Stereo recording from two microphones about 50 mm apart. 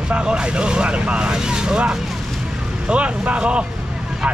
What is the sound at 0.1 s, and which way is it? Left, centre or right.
Speech, centre.